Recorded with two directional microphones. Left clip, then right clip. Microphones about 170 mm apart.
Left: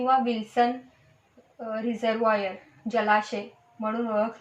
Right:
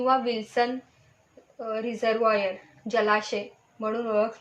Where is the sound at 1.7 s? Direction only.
45° right (ahead or behind).